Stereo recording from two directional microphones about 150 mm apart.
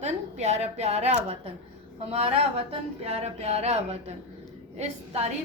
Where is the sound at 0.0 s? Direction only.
50° right (ahead or behind).